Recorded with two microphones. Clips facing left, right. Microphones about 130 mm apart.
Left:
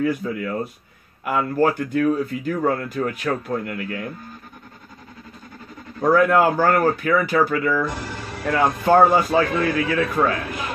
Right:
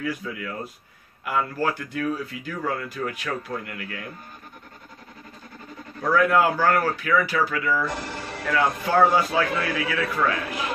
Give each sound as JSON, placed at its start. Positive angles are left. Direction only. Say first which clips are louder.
{"t": 0.0, "sound": "speech", "louder": "left 7 dB", "side_deg": 45}
{"t": 5.9, "sound": "speech", "louder": "left 4 dB", "side_deg": 45}